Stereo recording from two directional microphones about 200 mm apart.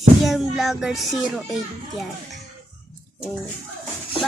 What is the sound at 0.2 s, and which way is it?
Music, centre (ahead or behind).